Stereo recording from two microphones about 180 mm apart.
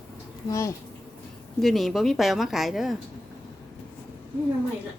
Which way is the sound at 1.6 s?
Centre (ahead or behind).